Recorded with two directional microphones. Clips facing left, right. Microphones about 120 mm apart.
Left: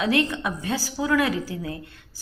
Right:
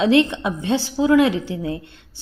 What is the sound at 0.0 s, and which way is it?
A woman's voice, 25° right (ahead or behind).